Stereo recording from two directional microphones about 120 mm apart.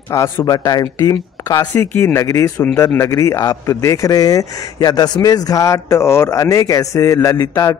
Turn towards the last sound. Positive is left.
turn(degrees=25)  # may be behind; listen again after turning